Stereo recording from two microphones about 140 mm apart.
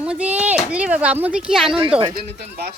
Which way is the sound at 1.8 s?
40° right (ahead or behind).